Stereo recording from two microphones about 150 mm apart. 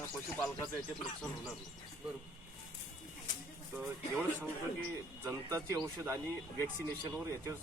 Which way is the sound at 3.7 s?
15° right (ahead or behind).